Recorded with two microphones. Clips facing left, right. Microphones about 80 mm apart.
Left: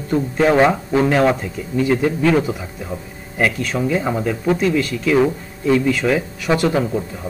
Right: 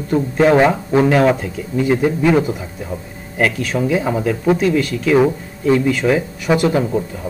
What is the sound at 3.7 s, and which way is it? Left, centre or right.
Speech, centre.